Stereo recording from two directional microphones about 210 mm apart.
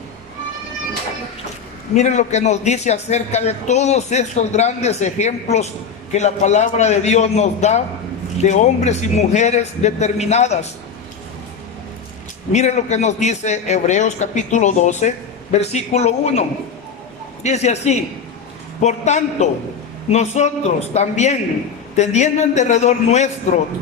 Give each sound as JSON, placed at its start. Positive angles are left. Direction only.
{"t": 2.0, "sound": "a man's voice", "side_deg": 35}
{"t": 12.5, "sound": "a man's voice", "side_deg": 35}
{"t": 17.4, "sound": "a man's voice", "side_deg": 30}